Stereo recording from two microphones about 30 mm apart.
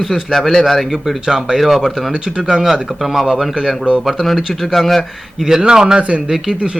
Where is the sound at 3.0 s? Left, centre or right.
Centre.